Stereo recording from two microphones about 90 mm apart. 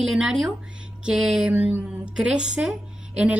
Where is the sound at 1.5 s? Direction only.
20° right (ahead or behind).